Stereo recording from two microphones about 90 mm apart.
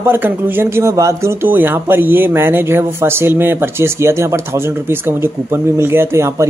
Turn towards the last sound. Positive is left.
turn(degrees=-30)  # may be behind; listen again after turning